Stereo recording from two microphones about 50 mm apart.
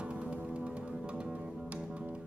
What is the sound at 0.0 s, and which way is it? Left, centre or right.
Music, right.